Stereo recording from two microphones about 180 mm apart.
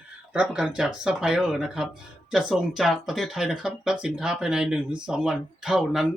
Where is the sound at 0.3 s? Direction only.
5° right (ahead or behind).